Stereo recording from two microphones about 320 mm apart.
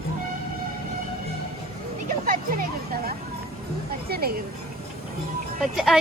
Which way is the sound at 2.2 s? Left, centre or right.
Right.